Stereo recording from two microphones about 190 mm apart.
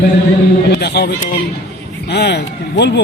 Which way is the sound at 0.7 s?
60° left (ahead or behind).